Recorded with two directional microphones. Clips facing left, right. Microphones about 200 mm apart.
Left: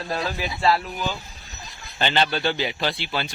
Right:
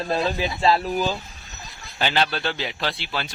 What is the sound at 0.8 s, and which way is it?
Speech, 35° right (ahead or behind).